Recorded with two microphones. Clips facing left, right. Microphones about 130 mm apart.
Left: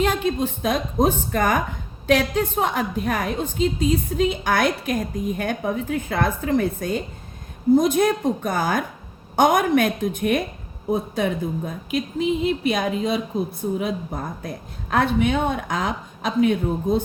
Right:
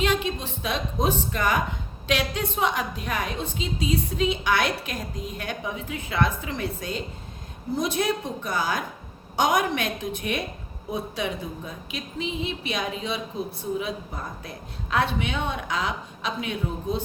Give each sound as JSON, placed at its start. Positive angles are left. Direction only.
{"t": 0.0, "sound": "speech", "side_deg": 45}